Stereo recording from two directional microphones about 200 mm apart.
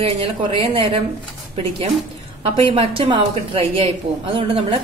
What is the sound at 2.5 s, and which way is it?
A woman's voice, 25° right (ahead or behind).